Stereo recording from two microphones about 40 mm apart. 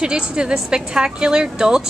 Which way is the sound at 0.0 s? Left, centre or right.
Right.